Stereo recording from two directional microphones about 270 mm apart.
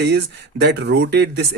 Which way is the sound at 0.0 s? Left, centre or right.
Right.